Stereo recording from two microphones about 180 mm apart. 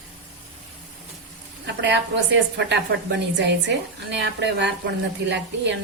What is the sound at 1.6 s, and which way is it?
Speech, 75° right (ahead or behind).